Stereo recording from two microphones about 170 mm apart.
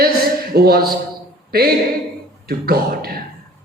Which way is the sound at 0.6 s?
60° right (ahead or behind).